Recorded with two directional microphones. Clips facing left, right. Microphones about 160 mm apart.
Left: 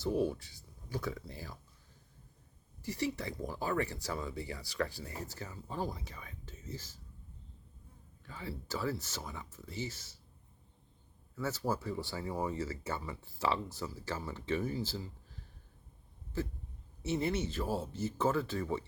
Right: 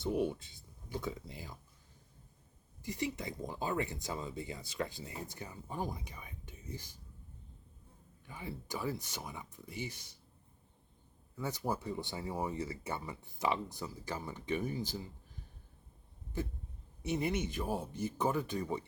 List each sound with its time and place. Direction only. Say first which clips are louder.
0.0 s speech: left 1 dB; 20° right (ahead or behind)
2.8 s speech: left 2 dB; 20° right (ahead or behind)
8.3 s speech: left 1 dB; 15° right (ahead or behind)
11.3 s speech: left 2 dB; 15° right (ahead or behind)
16.4 s speech: left 2 dB; 15° right (ahead or behind)